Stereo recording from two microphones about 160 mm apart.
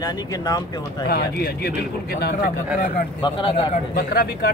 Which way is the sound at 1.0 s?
80° left.